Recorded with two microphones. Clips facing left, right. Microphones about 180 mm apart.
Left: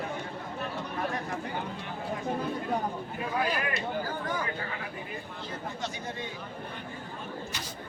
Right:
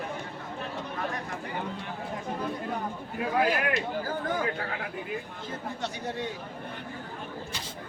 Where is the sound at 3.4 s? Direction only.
70° right (ahead or behind).